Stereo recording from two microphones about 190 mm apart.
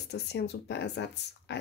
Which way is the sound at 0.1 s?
60° left (ahead or behind).